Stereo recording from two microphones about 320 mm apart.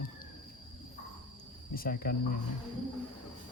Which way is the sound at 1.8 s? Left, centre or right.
Left.